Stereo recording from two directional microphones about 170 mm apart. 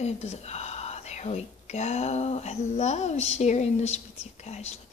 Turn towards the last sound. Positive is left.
turn(degrees=40)  # may be behind; listen again after turning